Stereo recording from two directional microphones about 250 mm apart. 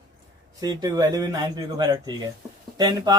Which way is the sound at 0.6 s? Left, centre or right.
Centre.